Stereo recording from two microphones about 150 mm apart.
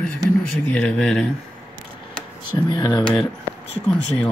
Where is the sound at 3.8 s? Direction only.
5° left (ahead or behind).